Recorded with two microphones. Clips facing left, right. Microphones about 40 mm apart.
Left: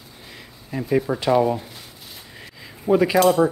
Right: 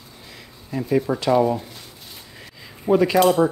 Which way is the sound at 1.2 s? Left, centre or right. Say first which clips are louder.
Even; centre.